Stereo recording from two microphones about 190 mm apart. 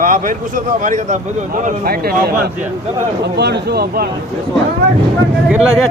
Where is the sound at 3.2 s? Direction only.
60° right (ahead or behind).